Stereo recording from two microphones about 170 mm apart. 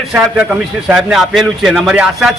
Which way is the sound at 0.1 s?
5° right (ahead or behind).